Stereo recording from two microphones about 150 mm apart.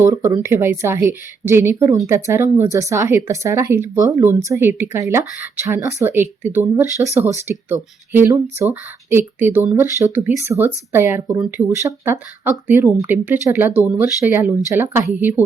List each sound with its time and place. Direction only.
0.0 s speech: 20° right (ahead or behind)